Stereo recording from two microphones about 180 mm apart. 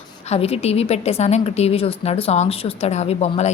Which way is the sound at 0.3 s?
35° left (ahead or behind).